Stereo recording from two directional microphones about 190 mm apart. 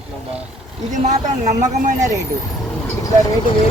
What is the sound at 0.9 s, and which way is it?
Speech, 40° right (ahead or behind).